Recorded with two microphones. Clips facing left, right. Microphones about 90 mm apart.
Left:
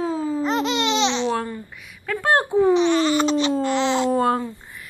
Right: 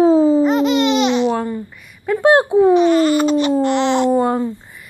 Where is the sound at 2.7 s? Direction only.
45° right (ahead or behind).